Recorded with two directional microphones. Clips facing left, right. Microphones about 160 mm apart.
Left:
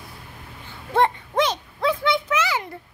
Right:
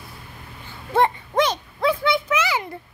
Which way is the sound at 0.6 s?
5° right (ahead or behind).